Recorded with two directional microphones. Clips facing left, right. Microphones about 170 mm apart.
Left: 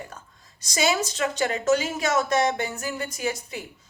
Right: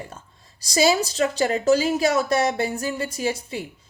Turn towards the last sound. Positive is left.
turn(degrees=-30)  # may be behind; listen again after turning